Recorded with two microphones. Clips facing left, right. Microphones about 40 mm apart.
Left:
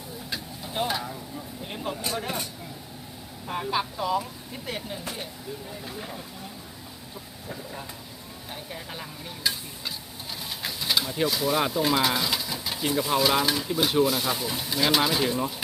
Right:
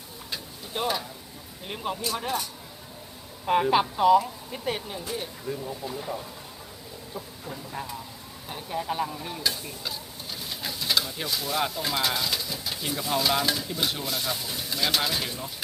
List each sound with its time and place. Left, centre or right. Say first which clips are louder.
0.3 s a sound: left 1 dB; centre
1.6 s speech: right 2 dB; centre
3.4 s speech: right 9 dB; right
3.7 s a woman's voice: right 4 dB; right
4.6 s speech: right 3 dB; centre
8.7 s speech: right 12 dB; centre
9.4 s speech: left 2 dB; centre